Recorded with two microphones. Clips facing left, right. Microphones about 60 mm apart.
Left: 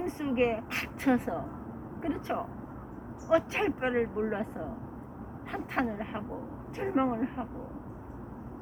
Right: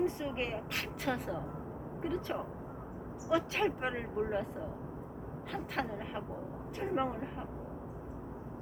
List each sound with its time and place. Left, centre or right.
0.0 s speech: left
5.5 s speech: left